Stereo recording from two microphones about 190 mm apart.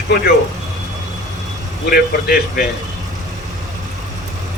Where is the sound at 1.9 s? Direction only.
55° left (ahead or behind).